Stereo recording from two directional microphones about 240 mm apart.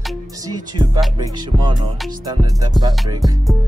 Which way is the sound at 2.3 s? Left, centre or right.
Centre.